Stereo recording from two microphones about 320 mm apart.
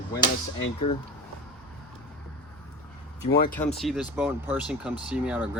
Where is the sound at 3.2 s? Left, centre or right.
Left.